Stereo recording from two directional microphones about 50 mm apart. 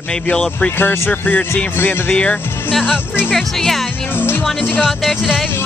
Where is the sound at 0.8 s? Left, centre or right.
Left.